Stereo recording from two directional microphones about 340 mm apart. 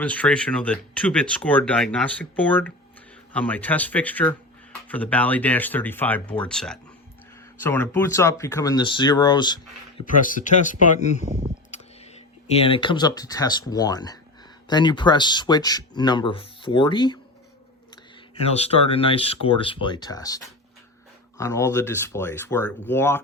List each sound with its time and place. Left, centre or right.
0.0 s speech: centre
10.2 s speech: left
12.7 s speech: centre
18.4 s speech: centre